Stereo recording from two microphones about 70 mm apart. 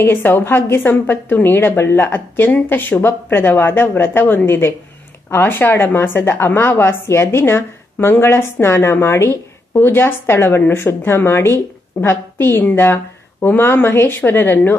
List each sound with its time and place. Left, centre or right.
0.1 s a woman's voice: left
11.4 s a woman's voice: left
13.8 s speech: left
14.2 s a woman's voice: left